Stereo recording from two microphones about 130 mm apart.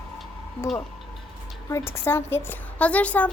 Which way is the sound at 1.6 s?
20° left (ahead or behind).